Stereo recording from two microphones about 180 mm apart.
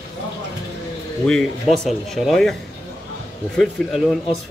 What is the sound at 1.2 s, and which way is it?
Speech, 5° left (ahead or behind).